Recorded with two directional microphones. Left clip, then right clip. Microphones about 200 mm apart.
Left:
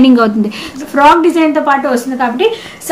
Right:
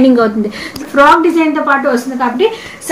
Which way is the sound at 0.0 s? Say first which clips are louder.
Even; 55° left (ahead or behind).